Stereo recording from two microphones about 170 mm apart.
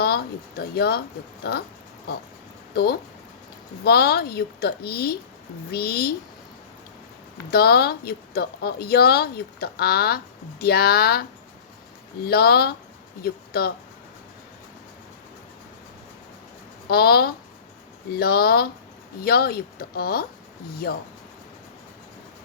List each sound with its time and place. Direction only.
0.0 s a woman's voice: 65° left (ahead or behind)
7.5 s a woman's voice: 65° left (ahead or behind)
16.9 s a woman's voice: 65° left (ahead or behind)